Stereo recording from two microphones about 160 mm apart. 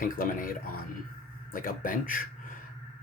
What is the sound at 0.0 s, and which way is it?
Speech, 60° left (ahead or behind).